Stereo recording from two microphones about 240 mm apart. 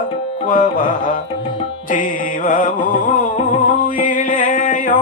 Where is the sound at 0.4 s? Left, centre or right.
Left.